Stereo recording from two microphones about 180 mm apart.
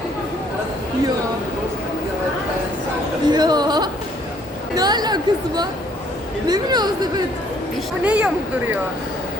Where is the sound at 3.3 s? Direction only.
25° right (ahead or behind).